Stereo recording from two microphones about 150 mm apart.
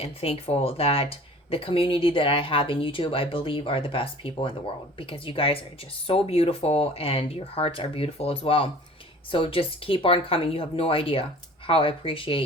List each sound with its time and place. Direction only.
0.0 s speech: 40° left (ahead or behind)